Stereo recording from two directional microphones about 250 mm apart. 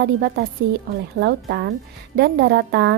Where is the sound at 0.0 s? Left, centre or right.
Right.